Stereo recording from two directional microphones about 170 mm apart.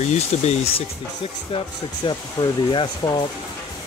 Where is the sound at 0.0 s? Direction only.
40° left (ahead or behind).